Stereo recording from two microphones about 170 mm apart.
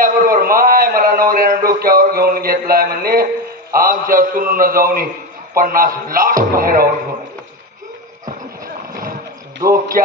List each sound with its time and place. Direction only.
0.0 s a man's voice: 55° right (ahead or behind)
9.7 s speech: 60° right (ahead or behind)